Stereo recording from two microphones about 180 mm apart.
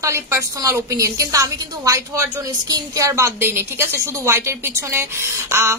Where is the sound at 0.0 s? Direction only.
15° right (ahead or behind).